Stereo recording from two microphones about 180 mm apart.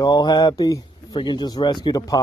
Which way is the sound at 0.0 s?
20° left (ahead or behind).